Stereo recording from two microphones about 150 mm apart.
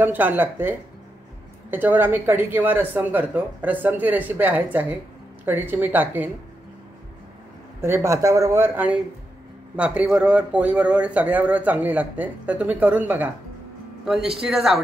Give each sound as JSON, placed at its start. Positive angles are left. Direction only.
{"t": 0.0, "sound": "speech", "side_deg": -10}
{"t": 7.8, "sound": "speech", "side_deg": -20}
{"t": 14.4, "sound": "speech", "side_deg": -5}